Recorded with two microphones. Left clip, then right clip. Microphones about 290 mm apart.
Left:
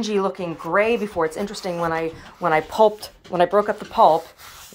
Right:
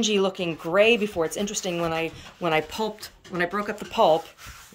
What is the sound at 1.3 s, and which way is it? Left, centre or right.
Speech, centre.